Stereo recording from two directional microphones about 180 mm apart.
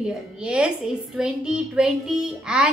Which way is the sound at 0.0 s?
5° right (ahead or behind).